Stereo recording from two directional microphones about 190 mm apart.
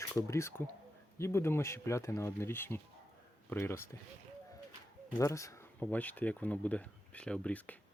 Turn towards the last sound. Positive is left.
turn(degrees=5)  # may be behind; listen again after turning